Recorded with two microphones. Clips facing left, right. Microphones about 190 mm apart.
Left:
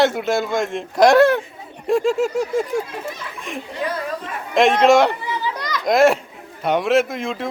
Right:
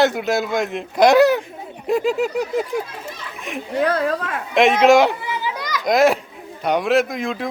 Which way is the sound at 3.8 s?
70° right (ahead or behind).